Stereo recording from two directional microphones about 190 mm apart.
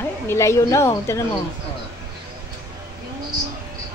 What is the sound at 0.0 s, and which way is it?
A woman's voice, 15° left (ahead or behind).